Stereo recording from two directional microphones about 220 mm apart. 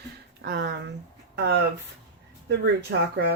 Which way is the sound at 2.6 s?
50° right (ahead or behind).